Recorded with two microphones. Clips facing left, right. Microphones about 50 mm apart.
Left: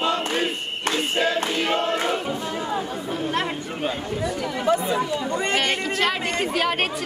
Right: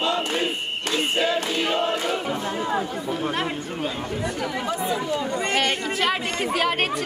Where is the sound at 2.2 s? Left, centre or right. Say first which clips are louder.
Right 1 dB; centre.